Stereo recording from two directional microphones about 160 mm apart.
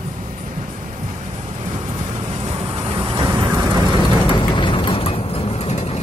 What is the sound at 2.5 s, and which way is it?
Vehicle, 35° right (ahead or behind).